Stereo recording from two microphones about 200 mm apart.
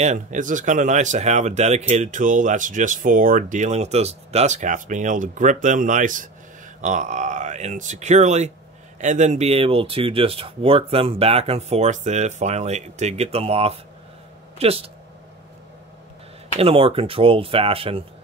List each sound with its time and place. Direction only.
0.0 s speech: 35° right (ahead or behind)
16.5 s speech: 30° right (ahead or behind)